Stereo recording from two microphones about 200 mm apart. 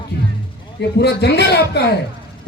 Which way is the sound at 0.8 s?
55° left (ahead or behind).